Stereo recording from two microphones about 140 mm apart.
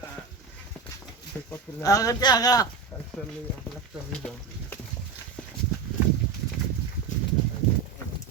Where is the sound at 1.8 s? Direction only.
25° left (ahead or behind).